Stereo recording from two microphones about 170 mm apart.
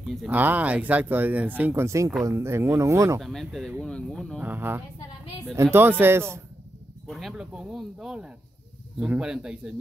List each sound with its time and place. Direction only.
0.0 s speech: centre (ahead or behind)
0.3 s speech: 10° right (ahead or behind)
3.2 s speech: centre (ahead or behind)
4.4 s speech: 10° right (ahead or behind)
7.1 s speech: centre (ahead or behind)